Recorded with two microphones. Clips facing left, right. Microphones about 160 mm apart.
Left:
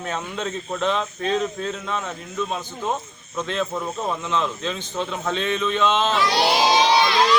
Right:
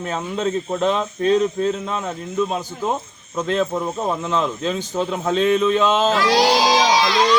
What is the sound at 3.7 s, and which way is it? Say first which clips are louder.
A man's voice: right 4 dB; 25° right (ahead or behind).